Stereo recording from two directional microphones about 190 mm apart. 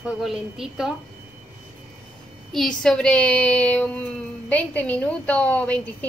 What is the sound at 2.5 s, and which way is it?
A woman's voice, 5° left (ahead or behind).